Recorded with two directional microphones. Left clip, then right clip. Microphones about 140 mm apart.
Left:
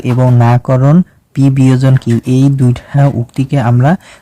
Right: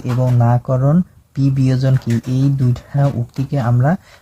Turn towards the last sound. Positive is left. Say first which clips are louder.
# left 6 dB
turn(degrees=25)  # may be behind; listen again after turning